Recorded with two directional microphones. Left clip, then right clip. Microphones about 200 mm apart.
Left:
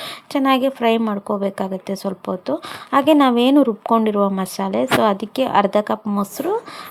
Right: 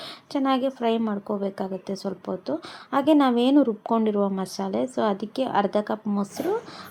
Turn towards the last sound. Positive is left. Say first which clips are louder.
# left 5 dB
turn(degrees=15)  # may be behind; listen again after turning